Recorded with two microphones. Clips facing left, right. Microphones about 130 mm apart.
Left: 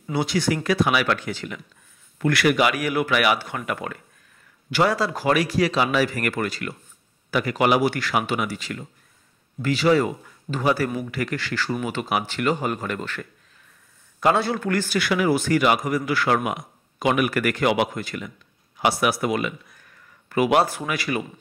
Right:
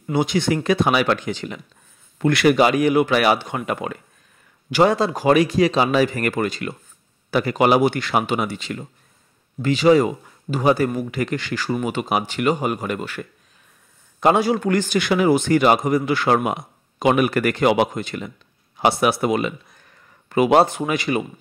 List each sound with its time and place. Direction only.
0.1 s a man's voice: 20° right (ahead or behind)